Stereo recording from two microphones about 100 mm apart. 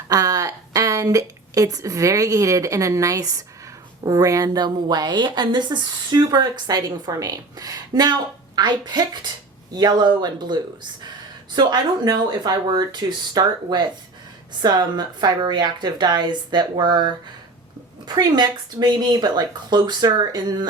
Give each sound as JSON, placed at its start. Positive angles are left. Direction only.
{"t": 0.1, "sound": "a woman's voice", "side_deg": -35}
{"t": 18.1, "sound": "a woman's voice", "side_deg": -45}